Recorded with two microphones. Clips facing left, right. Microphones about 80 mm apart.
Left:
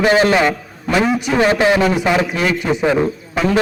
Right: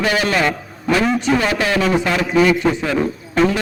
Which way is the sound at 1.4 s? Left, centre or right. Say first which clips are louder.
Left 5 dB; left.